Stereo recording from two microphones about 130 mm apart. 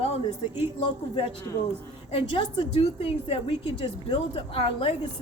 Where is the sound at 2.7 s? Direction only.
50° left (ahead or behind).